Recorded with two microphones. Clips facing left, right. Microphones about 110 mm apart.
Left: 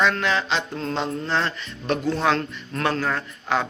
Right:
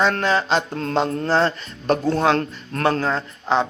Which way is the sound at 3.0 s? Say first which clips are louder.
Right 3 dB; 25° right (ahead or behind).